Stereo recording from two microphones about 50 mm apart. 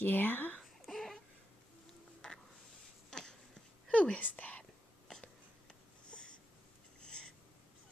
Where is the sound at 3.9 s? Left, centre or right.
Left.